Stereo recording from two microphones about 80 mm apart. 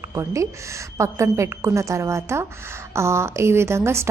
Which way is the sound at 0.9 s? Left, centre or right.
Right.